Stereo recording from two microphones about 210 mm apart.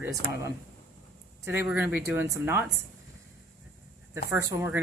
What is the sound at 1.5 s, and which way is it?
Speech, 10° right (ahead or behind).